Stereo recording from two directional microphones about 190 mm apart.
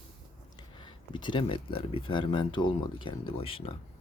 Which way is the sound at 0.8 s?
25° left (ahead or behind).